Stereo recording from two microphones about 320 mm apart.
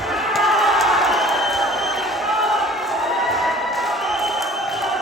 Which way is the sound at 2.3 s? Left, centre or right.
Centre.